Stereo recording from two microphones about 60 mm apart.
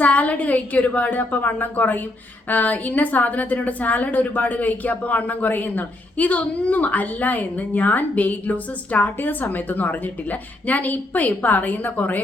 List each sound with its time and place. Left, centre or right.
0.0 s a woman's voice: left